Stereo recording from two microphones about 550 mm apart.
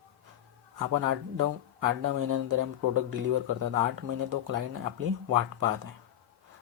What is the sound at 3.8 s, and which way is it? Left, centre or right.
Speech, right.